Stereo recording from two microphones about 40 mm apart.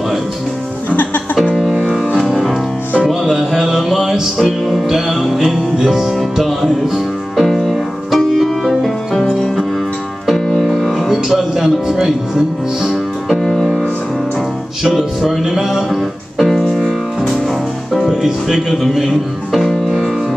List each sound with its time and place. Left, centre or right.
0.8 s music: left
1.6 s music: centre
10.6 s speech: centre
13.3 s music: centre
14.8 s music: centre
18.1 s speech: centre
18.7 s speech: centre